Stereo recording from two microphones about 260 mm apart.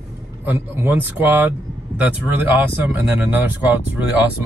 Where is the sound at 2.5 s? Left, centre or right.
Centre.